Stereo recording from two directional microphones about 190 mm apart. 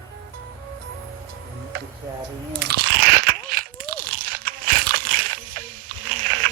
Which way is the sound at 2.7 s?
55° right (ahead or behind).